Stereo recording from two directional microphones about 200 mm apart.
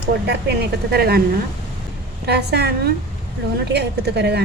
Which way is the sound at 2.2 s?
55° right (ahead or behind).